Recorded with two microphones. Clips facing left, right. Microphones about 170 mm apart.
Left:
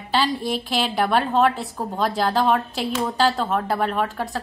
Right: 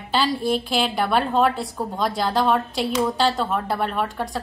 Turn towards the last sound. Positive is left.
turn(degrees=0)  # may be behind; listen again after turning